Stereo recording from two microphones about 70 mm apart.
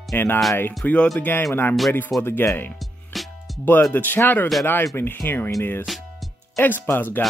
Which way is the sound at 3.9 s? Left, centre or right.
Left.